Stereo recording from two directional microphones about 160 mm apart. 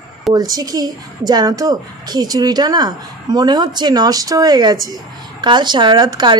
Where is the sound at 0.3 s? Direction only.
25° right (ahead or behind).